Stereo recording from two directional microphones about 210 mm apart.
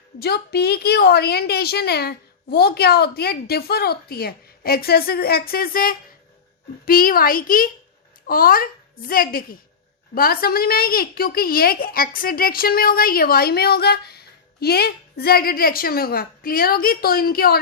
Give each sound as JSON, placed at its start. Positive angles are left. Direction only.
{"t": 0.2, "sound": "a woman's voice", "side_deg": 50}